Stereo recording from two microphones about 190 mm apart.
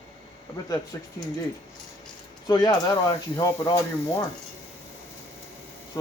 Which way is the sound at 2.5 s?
20° left (ahead or behind).